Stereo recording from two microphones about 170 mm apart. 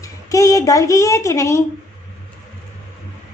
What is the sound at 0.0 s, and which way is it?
A woman's voice, 20° left (ahead or behind).